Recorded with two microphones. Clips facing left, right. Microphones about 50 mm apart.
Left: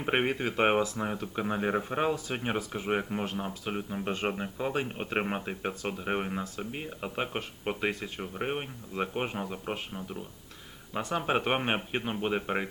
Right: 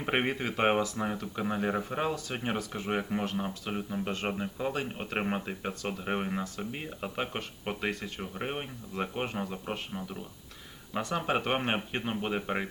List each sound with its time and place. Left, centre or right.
0.0 s speech: centre
1.2 s speech: left; by 3.8 s centre
3.8 s speech: centre
6.1 s speech: centre
10.9 s speech: centre
11.3 s speech: centre